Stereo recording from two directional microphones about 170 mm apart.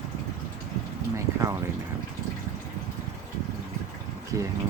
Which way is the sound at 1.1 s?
15° right (ahead or behind).